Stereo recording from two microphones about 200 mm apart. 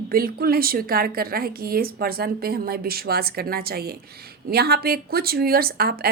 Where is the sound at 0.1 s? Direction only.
45° right (ahead or behind).